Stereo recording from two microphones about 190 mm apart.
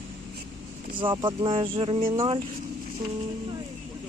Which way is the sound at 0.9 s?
25° right (ahead or behind).